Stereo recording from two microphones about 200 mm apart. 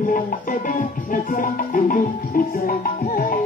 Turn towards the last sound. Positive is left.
turn(degrees=45)  # may be behind; listen again after turning